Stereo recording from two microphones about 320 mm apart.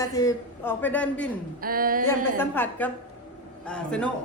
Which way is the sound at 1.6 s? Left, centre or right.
Right.